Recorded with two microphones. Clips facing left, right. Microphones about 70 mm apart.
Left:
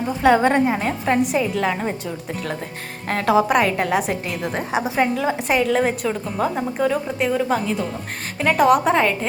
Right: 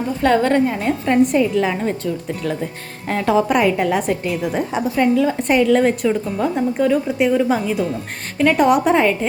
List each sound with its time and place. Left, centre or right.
0.2 s a woman's voice: centre
0.9 s a woman's voice: centre
3.1 s a woman's voice: centre
4.8 s a woman's voice: centre
5.4 s a woman's voice: centre